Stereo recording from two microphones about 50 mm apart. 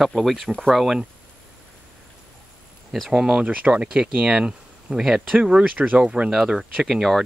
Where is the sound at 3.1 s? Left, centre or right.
Centre.